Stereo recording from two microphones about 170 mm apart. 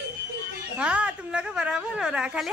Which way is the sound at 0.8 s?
5° right (ahead or behind).